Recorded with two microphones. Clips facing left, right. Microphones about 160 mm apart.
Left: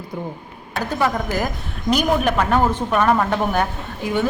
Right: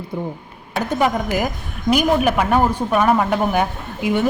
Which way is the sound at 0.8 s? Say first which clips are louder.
Right 2 dB; 15° right (ahead or behind).